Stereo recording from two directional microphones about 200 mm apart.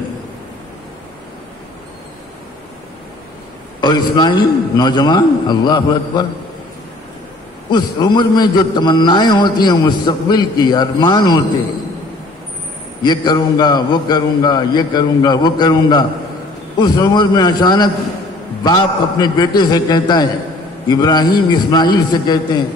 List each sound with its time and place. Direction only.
3.8 s a man's voice: 20° left (ahead or behind)
7.7 s a man's voice: 20° left (ahead or behind)
13.0 s a man's voice: 20° left (ahead or behind)